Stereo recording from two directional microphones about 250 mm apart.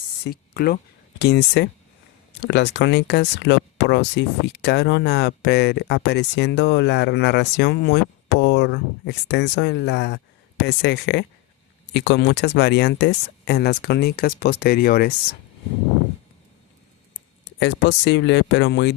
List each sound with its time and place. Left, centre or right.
0.3 s speech: left
17.6 s speech: left